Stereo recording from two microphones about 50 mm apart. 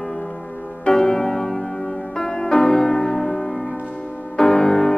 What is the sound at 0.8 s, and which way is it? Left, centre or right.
Music, centre.